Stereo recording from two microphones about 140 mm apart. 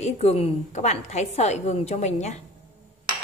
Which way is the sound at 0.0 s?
50° left (ahead or behind).